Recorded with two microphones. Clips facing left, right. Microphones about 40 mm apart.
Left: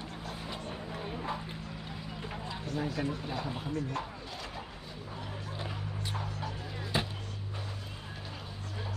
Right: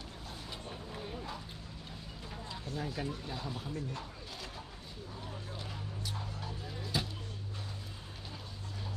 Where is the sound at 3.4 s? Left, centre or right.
Left.